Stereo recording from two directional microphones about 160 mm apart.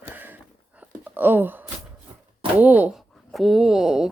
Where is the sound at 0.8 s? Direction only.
10° right (ahead or behind).